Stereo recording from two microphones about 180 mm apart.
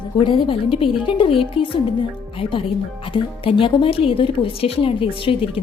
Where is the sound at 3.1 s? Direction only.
30° left (ahead or behind).